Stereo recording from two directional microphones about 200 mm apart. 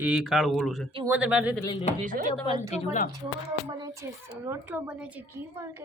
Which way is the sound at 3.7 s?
15° right (ahead or behind).